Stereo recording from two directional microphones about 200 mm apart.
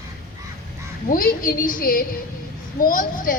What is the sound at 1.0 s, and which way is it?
A woman's voice, 45° left (ahead or behind).